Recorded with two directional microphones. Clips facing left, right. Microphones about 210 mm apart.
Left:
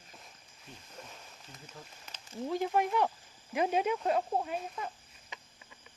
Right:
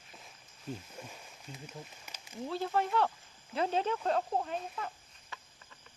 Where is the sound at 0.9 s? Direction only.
10° right (ahead or behind).